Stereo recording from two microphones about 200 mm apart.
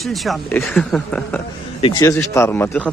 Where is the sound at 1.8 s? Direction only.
20° left (ahead or behind).